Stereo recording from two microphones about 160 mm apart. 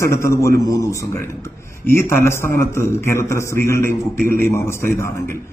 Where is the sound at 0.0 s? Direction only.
20° left (ahead or behind).